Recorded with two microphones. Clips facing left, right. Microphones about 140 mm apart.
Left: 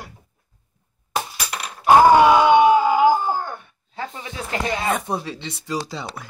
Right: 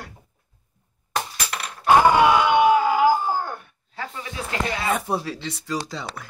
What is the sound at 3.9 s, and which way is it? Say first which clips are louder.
Snake: left 1 dB; 25° left (ahead or behind).